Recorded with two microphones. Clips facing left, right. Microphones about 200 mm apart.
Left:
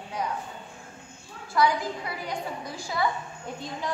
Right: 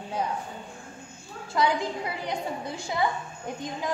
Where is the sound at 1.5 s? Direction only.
20° right (ahead or behind).